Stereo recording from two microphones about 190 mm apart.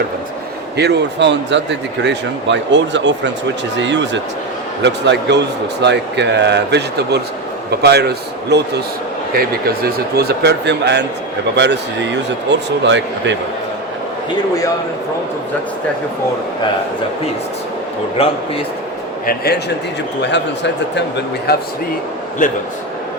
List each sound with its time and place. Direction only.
0.8 s a man's voice: 65° right (ahead or behind)
18.2 s a man's voice: 30° left (ahead or behind)
19.2 s a man's voice: 50° left (ahead or behind)
21.5 s speech: 55° left (ahead or behind)
22.4 s a man's voice: 40° left (ahead or behind)